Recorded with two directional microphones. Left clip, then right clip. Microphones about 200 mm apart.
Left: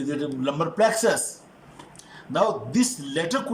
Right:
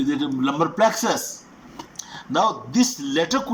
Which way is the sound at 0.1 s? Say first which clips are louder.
Right 4 dB; 20° right (ahead or behind).